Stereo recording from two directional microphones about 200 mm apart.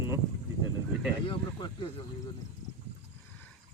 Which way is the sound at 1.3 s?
20° left (ahead or behind).